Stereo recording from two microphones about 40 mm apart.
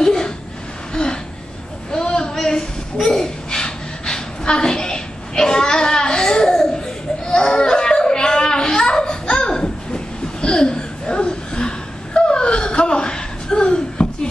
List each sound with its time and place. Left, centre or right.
0.0 s a sound: centre
2.3 s gasp: centre
7.2 s baby cry: left